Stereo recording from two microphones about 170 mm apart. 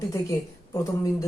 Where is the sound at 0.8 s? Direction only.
20° left (ahead or behind).